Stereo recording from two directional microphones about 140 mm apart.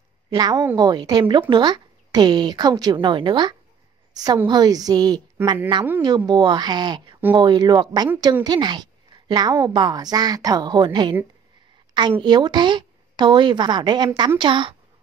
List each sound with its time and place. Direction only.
0.3 s a woman's voice: 30° right (ahead or behind)